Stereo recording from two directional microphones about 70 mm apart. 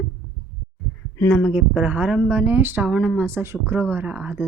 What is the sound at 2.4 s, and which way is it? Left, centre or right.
Speech, right.